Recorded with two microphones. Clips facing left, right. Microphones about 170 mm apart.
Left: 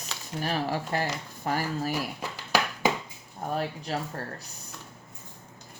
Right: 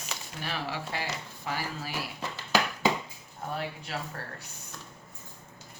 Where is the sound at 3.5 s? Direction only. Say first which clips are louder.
Left 5 dB; 40° left (ahead or behind).